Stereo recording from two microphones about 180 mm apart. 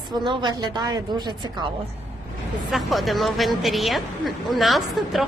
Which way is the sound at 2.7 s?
Centre (ahead or behind).